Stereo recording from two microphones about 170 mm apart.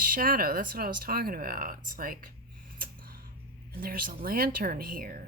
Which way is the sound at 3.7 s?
60° right (ahead or behind).